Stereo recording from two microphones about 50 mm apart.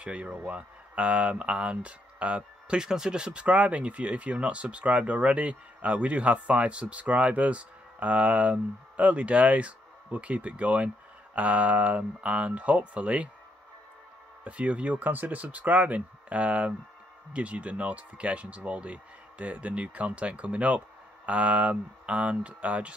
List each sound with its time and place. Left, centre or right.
0.0 s speech: right
14.4 s speech: right